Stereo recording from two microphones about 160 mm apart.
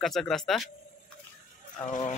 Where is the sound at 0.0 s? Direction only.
Centre (ahead or behind).